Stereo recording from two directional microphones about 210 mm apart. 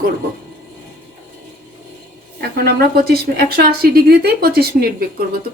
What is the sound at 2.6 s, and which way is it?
Speech, 45° right (ahead or behind).